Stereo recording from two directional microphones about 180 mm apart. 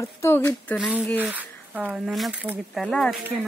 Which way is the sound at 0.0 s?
15° left (ahead or behind).